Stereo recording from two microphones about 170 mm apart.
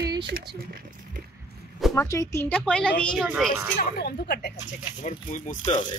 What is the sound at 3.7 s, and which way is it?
Speech, 60° left (ahead or behind).